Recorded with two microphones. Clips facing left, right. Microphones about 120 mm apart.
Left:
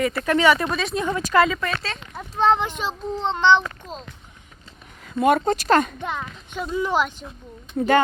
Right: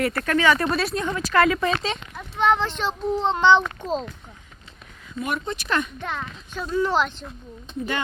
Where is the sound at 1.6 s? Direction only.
25° right (ahead or behind).